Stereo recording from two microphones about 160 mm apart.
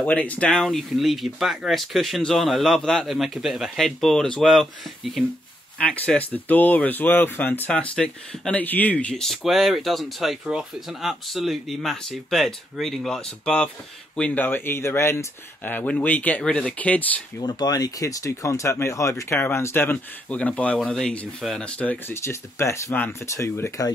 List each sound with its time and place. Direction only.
0.0 s speech: 10° left (ahead or behind)
17.4 s speech: 25° left (ahead or behind)